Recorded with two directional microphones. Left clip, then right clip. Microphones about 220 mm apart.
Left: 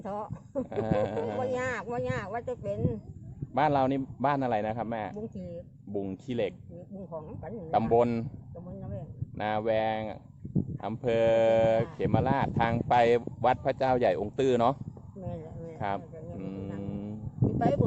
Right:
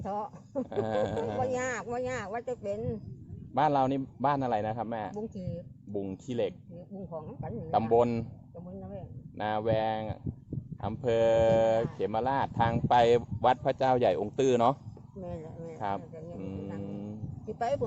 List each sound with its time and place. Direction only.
0.0 s speech: 5° right (ahead or behind)
3.5 s a man's voice: 5° left (ahead or behind)
5.3 s speech: 15° right (ahead or behind)
5.9 s a man's voice: 10° left (ahead or behind)
7.1 s speech: 10° right (ahead or behind)
7.7 s a man's voice: 5° left (ahead or behind)
9.4 s speech: 5° left (ahead or behind)
15.2 s a sound: 15° right (ahead or behind)
16.4 s music: 10° left (ahead or behind)